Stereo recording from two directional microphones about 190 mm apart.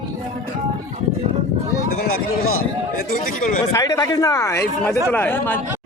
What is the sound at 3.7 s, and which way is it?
Speech, 20° left (ahead or behind).